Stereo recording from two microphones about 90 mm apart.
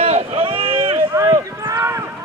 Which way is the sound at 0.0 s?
90° right.